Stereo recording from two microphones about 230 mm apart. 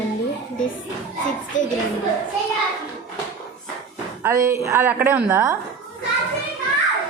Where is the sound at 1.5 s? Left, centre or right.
Left.